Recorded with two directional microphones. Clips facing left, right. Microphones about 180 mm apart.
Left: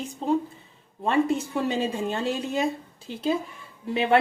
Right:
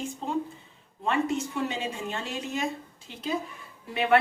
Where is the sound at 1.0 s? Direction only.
35° left (ahead or behind).